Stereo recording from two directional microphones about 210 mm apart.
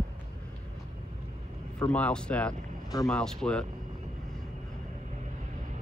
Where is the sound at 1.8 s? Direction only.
5° left (ahead or behind).